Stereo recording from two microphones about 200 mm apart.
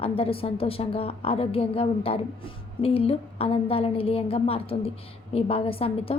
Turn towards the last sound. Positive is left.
turn(degrees=30)  # may be behind; listen again after turning